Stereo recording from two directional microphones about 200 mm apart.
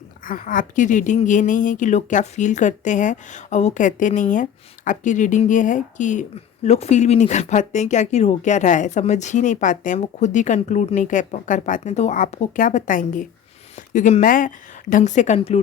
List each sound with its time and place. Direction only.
0.3 s a woman's voice: 40° left (ahead or behind)